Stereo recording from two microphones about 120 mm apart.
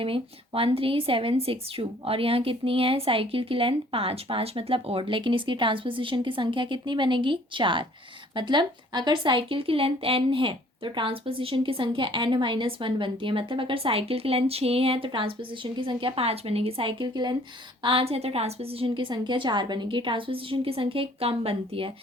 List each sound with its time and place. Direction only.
0.0 s a woman's voice: 50° right (ahead or behind)
17.8 s a woman's voice: 55° right (ahead or behind)